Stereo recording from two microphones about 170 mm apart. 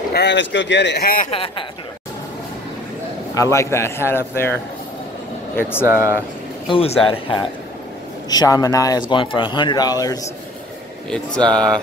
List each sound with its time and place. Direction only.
0.1 s speech: 85° left
1.3 s speech: 35° left (ahead or behind)
3.3 s a man's voice: 15° left (ahead or behind)
5.6 s a man's voice: 10° left (ahead or behind)
5.9 s speech: 15° right (ahead or behind)
6.7 s a man's voice: 35° left (ahead or behind)
11.1 s speech: 5° left (ahead or behind)